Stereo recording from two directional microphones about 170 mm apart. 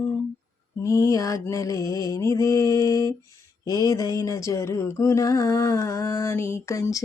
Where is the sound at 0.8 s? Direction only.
20° left (ahead or behind).